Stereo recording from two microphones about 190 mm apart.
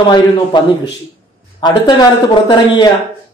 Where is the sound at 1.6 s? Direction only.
20° left (ahead or behind).